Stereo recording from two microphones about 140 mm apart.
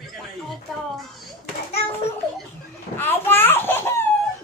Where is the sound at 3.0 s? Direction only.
15° left (ahead or behind).